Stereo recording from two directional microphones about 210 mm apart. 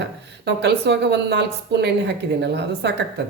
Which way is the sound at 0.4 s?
55° right (ahead or behind).